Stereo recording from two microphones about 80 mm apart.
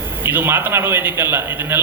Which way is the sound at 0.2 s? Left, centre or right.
Right.